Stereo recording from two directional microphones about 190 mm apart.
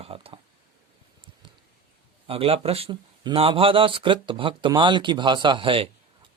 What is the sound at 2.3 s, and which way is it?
Speech, 30° right (ahead or behind).